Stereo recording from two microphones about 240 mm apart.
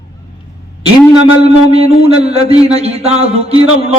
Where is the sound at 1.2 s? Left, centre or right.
Right.